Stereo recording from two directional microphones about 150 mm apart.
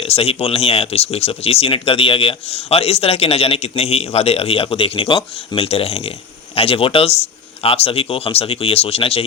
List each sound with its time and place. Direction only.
0.0 s speech: 40° left (ahead or behind)